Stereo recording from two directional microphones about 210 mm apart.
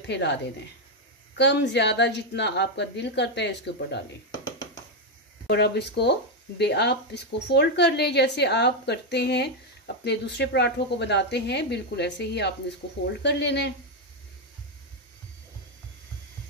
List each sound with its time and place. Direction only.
0.0 s speech: 55° left (ahead or behind)
5.5 s speech: 55° left (ahead or behind)